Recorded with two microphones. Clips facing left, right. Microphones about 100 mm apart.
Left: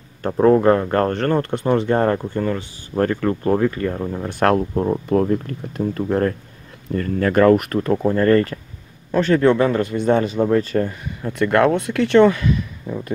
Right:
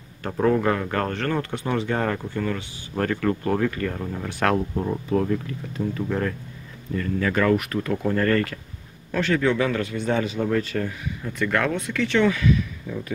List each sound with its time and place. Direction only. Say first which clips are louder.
0.2 s speech: left 7 dB; 35° left (ahead or behind)
4.3 s speech: left 5 dB; 50° left (ahead or behind)